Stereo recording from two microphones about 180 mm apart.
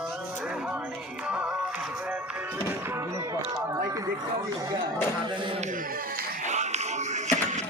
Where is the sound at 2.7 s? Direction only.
15° right (ahead or behind).